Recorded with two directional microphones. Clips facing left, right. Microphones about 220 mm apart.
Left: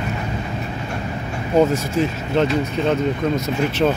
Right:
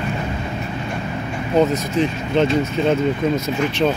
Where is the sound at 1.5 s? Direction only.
10° left (ahead or behind).